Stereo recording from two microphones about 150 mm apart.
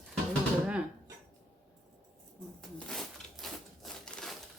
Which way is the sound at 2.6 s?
5° left (ahead or behind).